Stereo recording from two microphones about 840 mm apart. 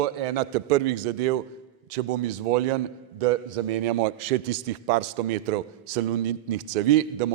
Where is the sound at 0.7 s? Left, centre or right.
Right.